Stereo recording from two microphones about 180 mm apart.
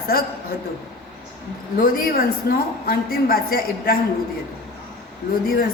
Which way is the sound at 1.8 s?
50° left (ahead or behind).